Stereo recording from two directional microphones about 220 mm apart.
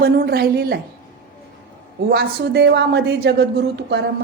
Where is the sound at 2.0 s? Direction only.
45° right (ahead or behind).